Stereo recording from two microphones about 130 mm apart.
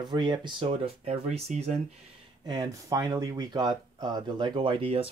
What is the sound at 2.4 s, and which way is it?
Speech, 30° right (ahead or behind).